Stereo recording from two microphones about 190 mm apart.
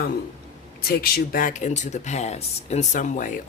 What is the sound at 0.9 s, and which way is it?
Speech, 50° left (ahead or behind).